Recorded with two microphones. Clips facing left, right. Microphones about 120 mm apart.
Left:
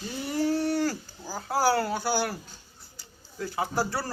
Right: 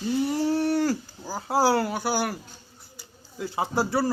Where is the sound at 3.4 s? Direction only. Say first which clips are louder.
Right 2 dB; 20° right (ahead or behind).